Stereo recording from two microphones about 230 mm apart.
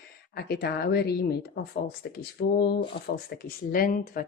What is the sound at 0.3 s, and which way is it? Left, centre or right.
Speech, left.